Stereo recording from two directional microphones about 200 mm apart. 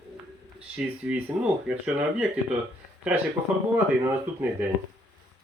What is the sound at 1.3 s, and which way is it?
Speech, 25° right (ahead or behind).